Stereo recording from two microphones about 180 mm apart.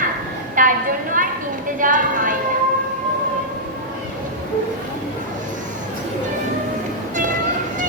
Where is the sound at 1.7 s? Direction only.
45° right (ahead or behind).